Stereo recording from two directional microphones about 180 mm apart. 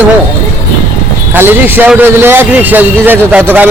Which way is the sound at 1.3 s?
10° right (ahead or behind).